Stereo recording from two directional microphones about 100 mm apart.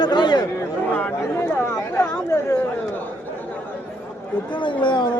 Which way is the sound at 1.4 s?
25° left (ahead or behind).